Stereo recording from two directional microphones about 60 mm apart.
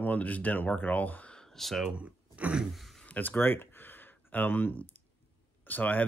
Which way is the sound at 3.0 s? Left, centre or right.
Left.